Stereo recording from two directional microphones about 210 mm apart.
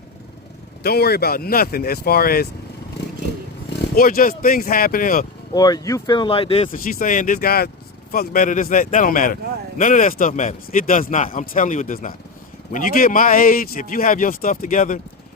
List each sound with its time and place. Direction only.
0.8 s speech: 50° left (ahead or behind)
3.7 s speech: 45° left (ahead or behind)
5.5 s speech: 20° left (ahead or behind)
6.7 s speech: 40° left (ahead or behind)